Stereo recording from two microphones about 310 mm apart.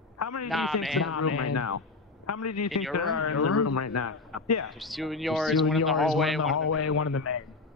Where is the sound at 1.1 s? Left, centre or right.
Left.